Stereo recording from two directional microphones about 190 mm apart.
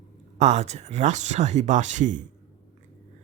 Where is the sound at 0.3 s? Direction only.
35° right (ahead or behind).